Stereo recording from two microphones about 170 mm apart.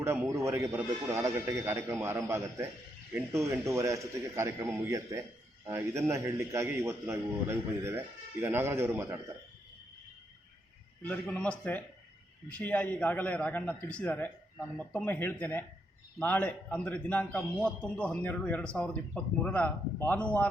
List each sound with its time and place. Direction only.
0.0 s a man's voice: 15° right (ahead or behind)
11.0 s a man's voice: 10° left (ahead or behind)